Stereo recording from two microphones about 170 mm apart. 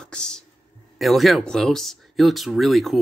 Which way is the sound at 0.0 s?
5° left (ahead or behind).